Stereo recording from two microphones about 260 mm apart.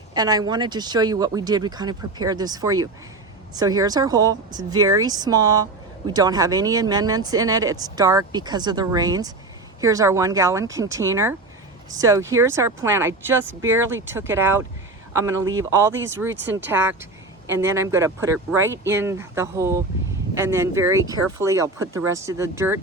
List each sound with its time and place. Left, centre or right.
0.1 s speech: centre